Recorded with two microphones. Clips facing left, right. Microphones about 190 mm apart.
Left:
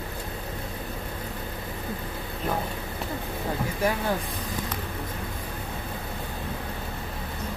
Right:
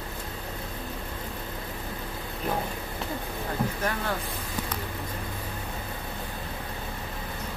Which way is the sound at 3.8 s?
10° left (ahead or behind).